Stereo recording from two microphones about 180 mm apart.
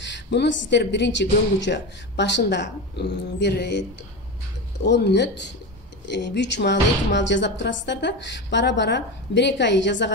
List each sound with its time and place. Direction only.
0.0 s speech: 75° left (ahead or behind)
4.8 s speech: 70° left (ahead or behind)